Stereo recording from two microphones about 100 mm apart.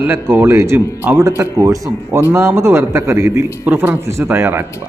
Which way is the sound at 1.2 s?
30° right (ahead or behind).